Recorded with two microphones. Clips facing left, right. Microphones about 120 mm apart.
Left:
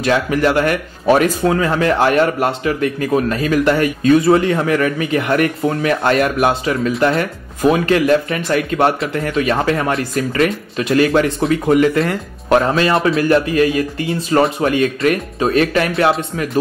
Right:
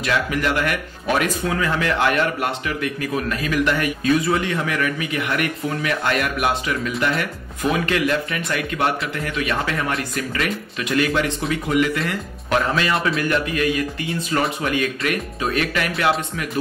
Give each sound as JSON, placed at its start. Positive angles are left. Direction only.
{"t": 0.0, "sound": "speech", "side_deg": 35}